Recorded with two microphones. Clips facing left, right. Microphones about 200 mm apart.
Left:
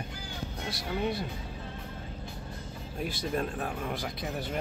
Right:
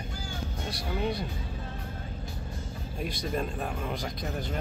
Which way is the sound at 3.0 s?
5° left (ahead or behind).